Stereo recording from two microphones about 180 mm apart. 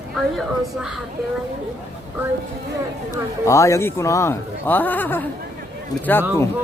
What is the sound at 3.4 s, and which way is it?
Speech, 15° left (ahead or behind).